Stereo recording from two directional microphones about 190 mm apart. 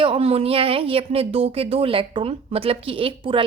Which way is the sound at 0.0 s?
30° right (ahead or behind).